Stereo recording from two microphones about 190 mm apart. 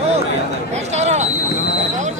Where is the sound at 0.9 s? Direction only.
35° right (ahead or behind).